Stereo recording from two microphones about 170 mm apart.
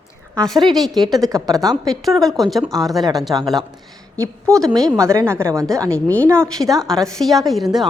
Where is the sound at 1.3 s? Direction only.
20° right (ahead or behind).